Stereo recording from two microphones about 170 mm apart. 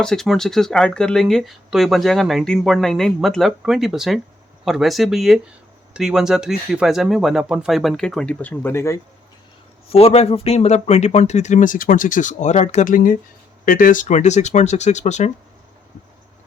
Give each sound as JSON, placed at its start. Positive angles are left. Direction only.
{"t": 0.0, "sound": "speech", "side_deg": 5}
{"t": 9.9, "sound": "speech", "side_deg": 35}